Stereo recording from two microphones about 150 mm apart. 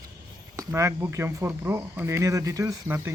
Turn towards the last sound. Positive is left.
turn(degrees=-20)  # may be behind; listen again after turning